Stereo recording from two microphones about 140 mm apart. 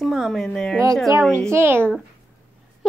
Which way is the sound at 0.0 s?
Centre (ahead or behind).